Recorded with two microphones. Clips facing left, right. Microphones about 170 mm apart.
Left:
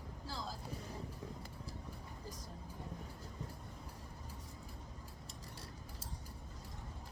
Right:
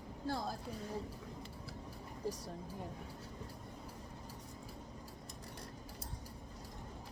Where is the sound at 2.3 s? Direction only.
75° right (ahead or behind).